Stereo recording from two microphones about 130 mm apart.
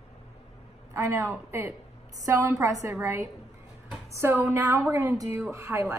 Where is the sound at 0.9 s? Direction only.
20° right (ahead or behind).